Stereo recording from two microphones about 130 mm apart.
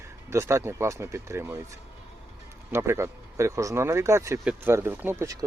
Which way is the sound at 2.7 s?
20° right (ahead or behind).